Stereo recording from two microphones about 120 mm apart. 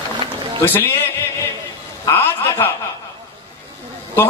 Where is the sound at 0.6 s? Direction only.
20° left (ahead or behind).